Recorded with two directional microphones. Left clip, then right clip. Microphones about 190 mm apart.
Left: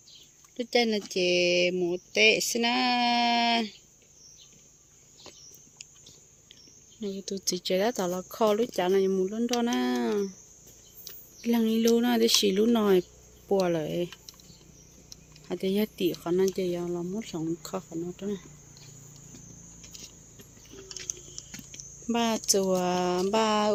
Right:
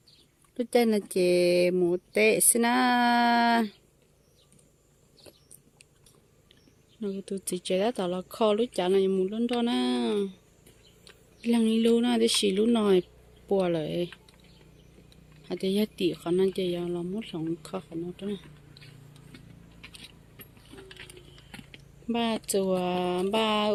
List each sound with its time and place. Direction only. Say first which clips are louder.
0.5 s speech: right 1 dB; 20° right (ahead or behind)
7.0 s speech: left 1 dB; 5° right (ahead or behind)
15.4 s speech: even; 10° right (ahead or behind)
22.0 s speech: left 2 dB; centre (ahead or behind)